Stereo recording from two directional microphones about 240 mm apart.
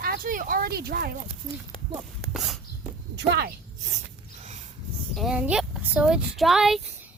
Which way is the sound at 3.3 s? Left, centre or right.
Right.